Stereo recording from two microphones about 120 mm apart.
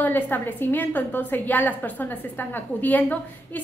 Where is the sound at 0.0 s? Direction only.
15° left (ahead or behind).